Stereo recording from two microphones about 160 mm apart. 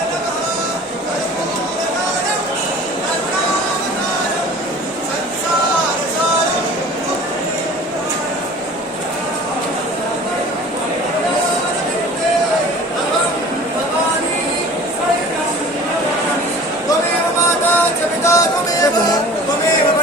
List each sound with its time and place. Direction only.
18.2 s music: 15° left (ahead or behind)